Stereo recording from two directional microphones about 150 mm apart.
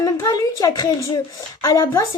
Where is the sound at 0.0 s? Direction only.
25° left (ahead or behind).